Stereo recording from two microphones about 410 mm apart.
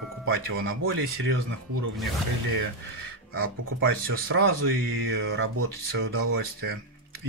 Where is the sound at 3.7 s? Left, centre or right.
Right.